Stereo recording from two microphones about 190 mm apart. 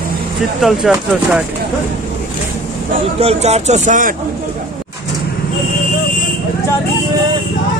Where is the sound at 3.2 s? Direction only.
35° right (ahead or behind).